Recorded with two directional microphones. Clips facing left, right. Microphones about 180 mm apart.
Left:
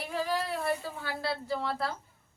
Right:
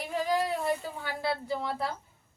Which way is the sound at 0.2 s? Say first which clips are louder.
Right 3 dB; 15° right (ahead or behind).